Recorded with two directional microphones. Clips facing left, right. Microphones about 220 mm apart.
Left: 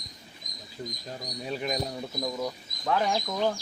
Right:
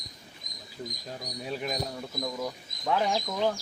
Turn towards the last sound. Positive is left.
turn(degrees=0)  # may be behind; listen again after turning